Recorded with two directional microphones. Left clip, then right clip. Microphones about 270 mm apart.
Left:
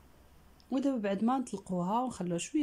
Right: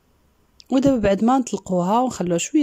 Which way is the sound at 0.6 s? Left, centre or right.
Right.